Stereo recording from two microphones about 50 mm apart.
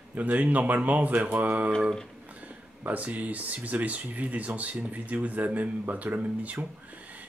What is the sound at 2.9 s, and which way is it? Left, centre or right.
Speech, right.